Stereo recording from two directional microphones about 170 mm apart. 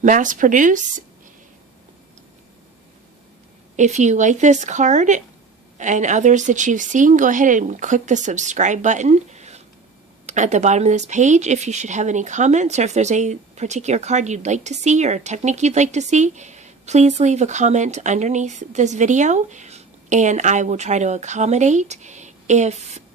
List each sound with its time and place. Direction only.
0.0 s speech: 50° right (ahead or behind)
3.8 s speech: 45° right (ahead or behind)